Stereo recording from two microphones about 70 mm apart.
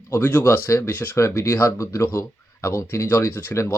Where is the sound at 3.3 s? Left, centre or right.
Left.